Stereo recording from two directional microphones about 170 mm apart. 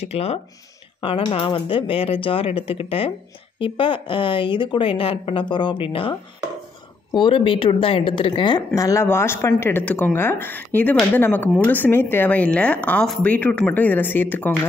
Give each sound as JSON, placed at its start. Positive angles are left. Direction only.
{"t": 0.0, "sound": "a woman's voice", "side_deg": 35}